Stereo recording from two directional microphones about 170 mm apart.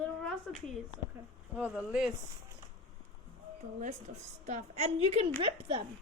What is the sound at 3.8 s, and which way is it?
A woman's voice, 45° right (ahead or behind).